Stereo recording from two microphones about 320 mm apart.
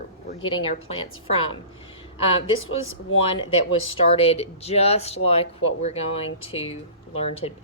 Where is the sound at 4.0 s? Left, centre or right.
Centre.